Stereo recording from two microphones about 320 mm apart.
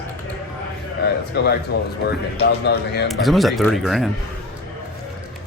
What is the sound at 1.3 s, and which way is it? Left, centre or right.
A man's voice, left.